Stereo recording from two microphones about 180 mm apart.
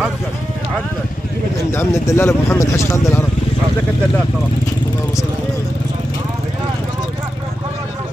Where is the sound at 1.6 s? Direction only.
15° left (ahead or behind).